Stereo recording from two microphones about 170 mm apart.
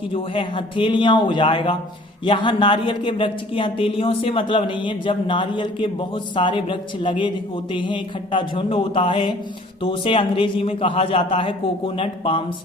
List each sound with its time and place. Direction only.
0.1 s a man's voice: 30° left (ahead or behind)